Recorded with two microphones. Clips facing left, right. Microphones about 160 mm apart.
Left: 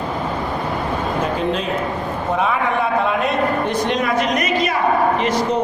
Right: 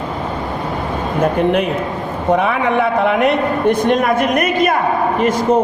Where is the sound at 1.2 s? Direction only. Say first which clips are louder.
Right 10 dB; 60° right (ahead or behind).